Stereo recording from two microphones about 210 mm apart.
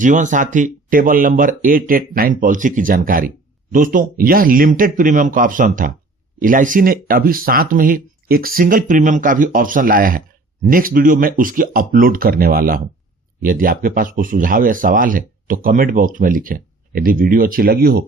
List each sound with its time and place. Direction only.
0.0 s speech: 35° right (ahead or behind)